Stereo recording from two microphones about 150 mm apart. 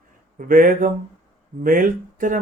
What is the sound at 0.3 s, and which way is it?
Speech, 65° right (ahead or behind).